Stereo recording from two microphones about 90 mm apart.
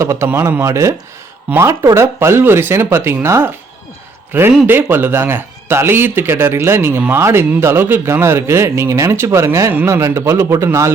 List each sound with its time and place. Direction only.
0.0 s a man's voice: 30° right (ahead or behind)